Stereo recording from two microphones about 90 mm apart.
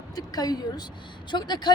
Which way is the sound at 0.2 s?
45° left (ahead or behind).